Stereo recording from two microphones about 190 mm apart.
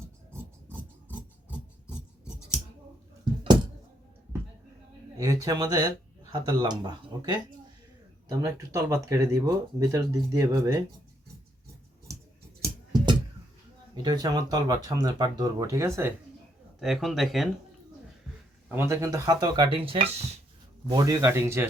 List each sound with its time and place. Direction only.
5.1 s speech: 20° right (ahead or behind)
12.6 s music: 20° right (ahead or behind)
14.0 s speech: 20° right (ahead or behind)
16.8 s speech: centre (ahead or behind)
18.7 s speech: 15° right (ahead or behind)